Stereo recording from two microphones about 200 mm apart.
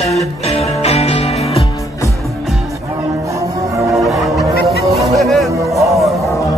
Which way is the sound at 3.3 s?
15° right (ahead or behind).